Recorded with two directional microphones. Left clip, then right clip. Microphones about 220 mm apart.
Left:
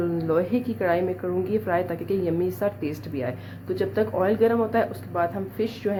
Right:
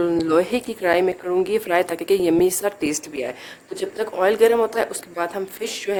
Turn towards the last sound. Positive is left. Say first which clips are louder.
# right 2 dB
turn(degrees=-55)  # may be behind; listen again after turning